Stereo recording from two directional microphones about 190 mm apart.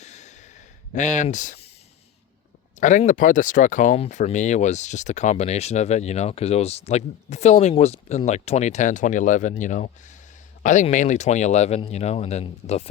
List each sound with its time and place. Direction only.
0.0 s sigh: 35° left (ahead or behind)
0.9 s speech: 40° left (ahead or behind)
2.8 s speech: 40° left (ahead or behind)